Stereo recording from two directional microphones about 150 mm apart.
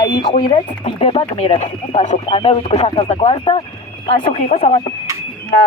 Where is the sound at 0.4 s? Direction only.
40° left (ahead or behind).